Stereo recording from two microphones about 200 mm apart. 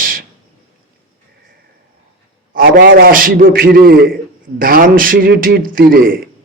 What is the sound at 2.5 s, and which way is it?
A man's voice, 45° right (ahead or behind).